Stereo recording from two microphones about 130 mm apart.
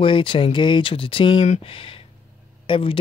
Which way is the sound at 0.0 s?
40° left (ahead or behind).